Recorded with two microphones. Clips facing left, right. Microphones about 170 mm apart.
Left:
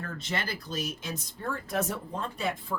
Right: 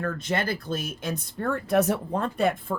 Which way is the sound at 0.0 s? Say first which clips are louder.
Right 7 dB; 50° right (ahead or behind).